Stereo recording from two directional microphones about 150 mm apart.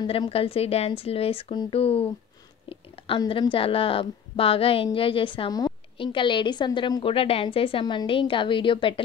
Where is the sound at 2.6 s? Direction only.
35° left (ahead or behind).